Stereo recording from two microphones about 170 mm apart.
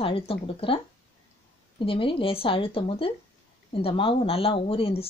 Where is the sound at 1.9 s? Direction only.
30° left (ahead or behind).